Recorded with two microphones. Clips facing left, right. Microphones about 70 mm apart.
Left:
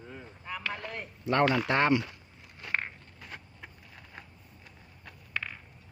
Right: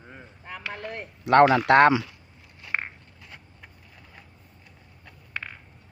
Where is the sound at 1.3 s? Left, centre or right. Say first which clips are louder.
Right 9 dB; right.